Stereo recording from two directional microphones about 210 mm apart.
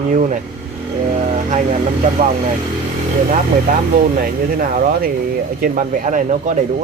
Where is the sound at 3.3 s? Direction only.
40° right (ahead or behind).